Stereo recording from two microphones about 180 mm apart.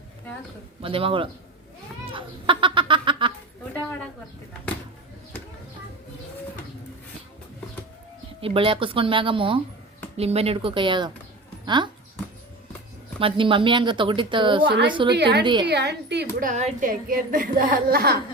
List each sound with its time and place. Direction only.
0.8 s speech: 30° right (ahead or behind)
2.1 s chicken: 30° right (ahead or behind)
3.7 s a sound: 10° left (ahead or behind)
8.4 s speech: 30° right (ahead or behind)
13.1 s speech: 30° right (ahead or behind)
15.1 s a woman's voice: 70° right (ahead or behind)
16.4 s a woman's voice: 40° right (ahead or behind)
17.3 s a woman's voice: 50° right (ahead or behind)